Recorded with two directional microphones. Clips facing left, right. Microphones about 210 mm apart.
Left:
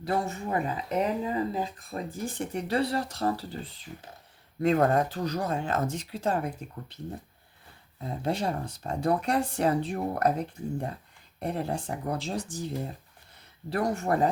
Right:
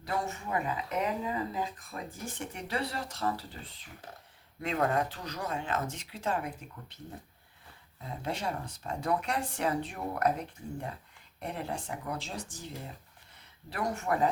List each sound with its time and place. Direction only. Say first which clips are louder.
0.0 s speech: left 5 dB; 35° left (ahead or behind)
4.6 s speech: left 7 dB; 45° left (ahead or behind)
8.2 s speech: left 6 dB; 35° left (ahead or behind)
13.7 s speech: left 5 dB; 35° left (ahead or behind)